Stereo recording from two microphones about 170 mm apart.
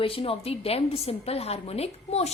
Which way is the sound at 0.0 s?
35° left (ahead or behind).